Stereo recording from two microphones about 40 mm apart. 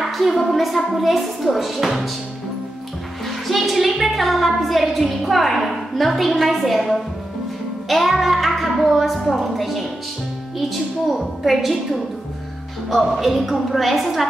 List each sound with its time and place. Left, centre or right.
0.0 s a woman's voice: centre
3.3 s a woman's voice: centre
7.9 s music: centre
8.8 s a woman's voice: centre
12.9 s a woman's voice: centre